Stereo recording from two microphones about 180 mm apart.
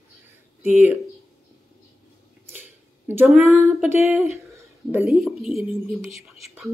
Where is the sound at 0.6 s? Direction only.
10° right (ahead or behind).